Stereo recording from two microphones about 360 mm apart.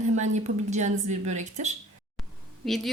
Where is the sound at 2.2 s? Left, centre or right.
Centre.